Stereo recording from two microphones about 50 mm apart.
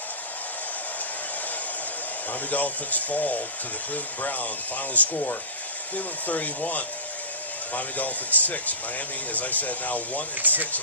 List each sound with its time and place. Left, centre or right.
2.3 s speech: left
10.4 s speech: right